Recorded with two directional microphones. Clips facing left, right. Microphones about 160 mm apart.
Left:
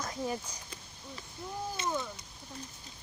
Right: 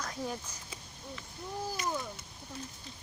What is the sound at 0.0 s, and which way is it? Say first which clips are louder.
Speech: left 2 dB; 5° left (ahead or behind).